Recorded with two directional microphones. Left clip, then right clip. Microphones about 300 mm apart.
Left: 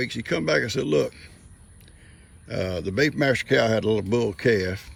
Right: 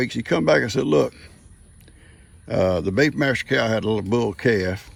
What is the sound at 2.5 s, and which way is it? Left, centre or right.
Speech, centre.